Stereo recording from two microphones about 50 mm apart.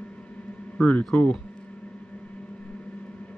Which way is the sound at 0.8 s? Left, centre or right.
Left.